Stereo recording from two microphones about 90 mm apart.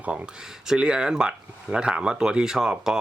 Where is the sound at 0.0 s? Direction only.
15° right (ahead or behind).